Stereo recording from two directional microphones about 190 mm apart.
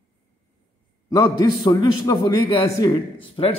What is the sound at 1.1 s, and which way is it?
A man's voice, 20° left (ahead or behind).